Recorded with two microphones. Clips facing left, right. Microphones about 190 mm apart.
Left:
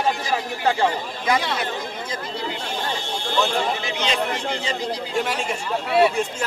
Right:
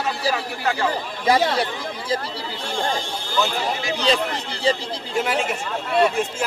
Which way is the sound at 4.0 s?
35° right (ahead or behind).